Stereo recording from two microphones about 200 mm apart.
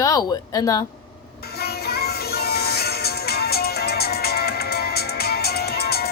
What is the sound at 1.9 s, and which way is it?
Music, 50° left (ahead or behind).